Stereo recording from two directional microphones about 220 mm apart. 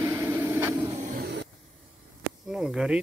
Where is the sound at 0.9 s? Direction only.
35° right (ahead or behind).